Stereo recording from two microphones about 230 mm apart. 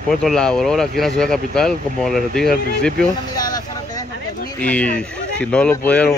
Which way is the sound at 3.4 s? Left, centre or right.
Centre.